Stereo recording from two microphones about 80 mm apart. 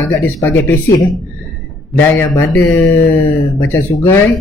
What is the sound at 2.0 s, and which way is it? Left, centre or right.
Speech, left.